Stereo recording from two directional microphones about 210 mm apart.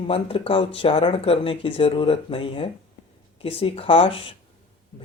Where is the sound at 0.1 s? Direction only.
25° left (ahead or behind).